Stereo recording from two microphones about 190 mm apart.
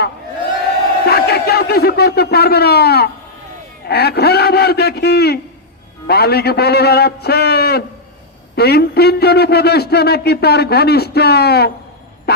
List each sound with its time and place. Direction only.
1.0 s a man's voice: 55° left (ahead or behind)